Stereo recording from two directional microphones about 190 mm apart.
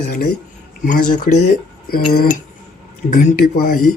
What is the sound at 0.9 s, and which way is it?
Speech, 40° left (ahead or behind).